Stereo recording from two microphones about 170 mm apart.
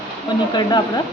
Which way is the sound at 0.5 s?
25° left (ahead or behind).